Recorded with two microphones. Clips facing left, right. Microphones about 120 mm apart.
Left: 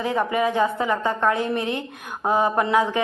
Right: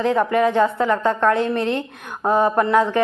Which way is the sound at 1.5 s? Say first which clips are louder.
Right 4 dB; 60° right (ahead or behind).